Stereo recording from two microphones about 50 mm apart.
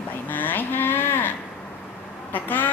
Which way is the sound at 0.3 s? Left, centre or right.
Left.